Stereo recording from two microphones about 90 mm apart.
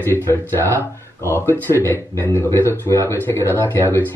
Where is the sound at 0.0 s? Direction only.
25° left (ahead or behind).